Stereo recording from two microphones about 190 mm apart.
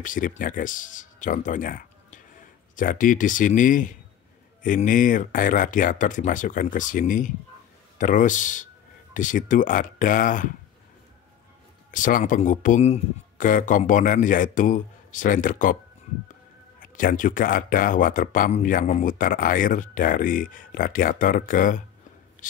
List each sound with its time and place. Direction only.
0.0 s speech: 45° left (ahead or behind)
11.9 s speech: 45° left (ahead or behind)
16.8 s speech: 45° left (ahead or behind)
22.4 s a sound: 45° left (ahead or behind)